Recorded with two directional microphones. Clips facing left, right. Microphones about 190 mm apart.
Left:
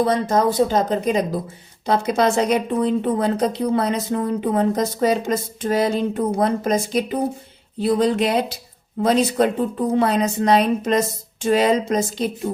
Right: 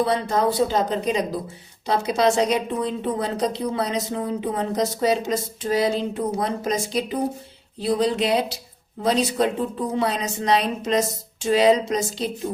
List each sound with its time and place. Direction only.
0.0 s a woman's voice: 45° left (ahead or behind)